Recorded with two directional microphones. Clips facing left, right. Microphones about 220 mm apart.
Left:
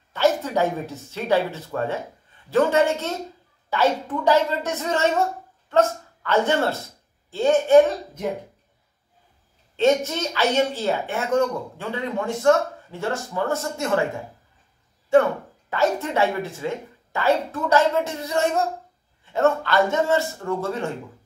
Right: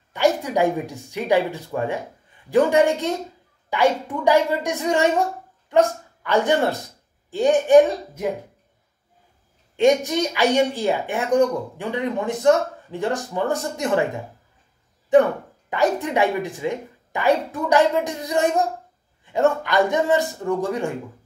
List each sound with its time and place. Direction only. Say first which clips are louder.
0.1 s a woman's voice: right 1 dB; 15° right (ahead or behind)
9.8 s speech: right 2 dB; 15° right (ahead or behind)
15.1 s speech: right 2 dB; 15° right (ahead or behind)